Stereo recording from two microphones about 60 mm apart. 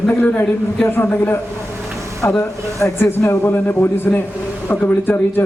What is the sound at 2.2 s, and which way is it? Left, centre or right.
A man's voice, left.